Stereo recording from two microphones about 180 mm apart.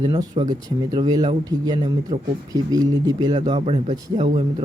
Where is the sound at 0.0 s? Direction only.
25° right (ahead or behind).